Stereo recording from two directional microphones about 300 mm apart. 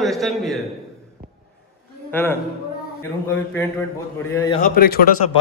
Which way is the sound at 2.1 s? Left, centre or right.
Centre.